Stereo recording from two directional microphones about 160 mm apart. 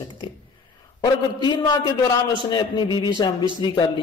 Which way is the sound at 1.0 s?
30° left (ahead or behind).